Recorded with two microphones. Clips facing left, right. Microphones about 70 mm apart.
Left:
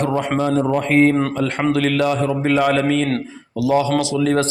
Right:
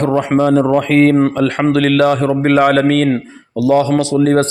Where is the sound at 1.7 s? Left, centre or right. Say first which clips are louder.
Right 6 dB; right.